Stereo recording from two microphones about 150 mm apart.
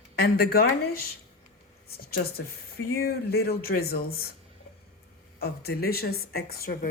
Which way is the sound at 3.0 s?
90° left.